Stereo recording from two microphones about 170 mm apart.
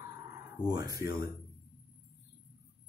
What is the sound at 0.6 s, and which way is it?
Speech, 20° right (ahead or behind).